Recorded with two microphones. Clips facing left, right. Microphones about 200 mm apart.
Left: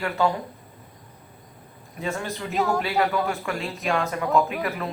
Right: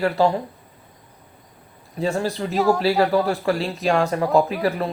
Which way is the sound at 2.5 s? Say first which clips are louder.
Right 5 dB; centre (ahead or behind).